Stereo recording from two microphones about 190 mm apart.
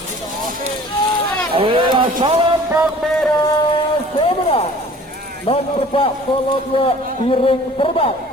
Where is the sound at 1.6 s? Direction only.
25° right (ahead or behind).